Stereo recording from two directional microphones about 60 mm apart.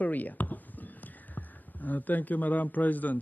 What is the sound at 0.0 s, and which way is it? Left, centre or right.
Speech, left.